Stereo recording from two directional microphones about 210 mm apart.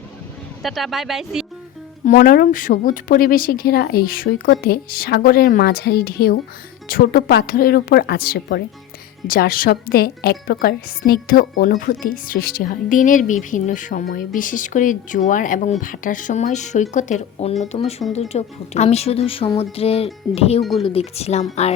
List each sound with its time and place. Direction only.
0.6 s speech: centre (ahead or behind)
2.0 s speech: 40° left (ahead or behind)